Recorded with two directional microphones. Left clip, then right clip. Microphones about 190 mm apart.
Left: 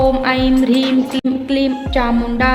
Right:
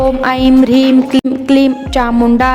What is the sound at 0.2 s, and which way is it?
Music, 50° right (ahead or behind).